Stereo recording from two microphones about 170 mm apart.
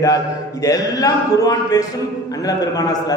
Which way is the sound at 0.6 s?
20° left (ahead or behind).